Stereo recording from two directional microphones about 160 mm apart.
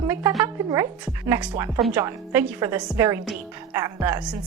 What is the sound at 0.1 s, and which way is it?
A woman's voice, 15° right (ahead or behind).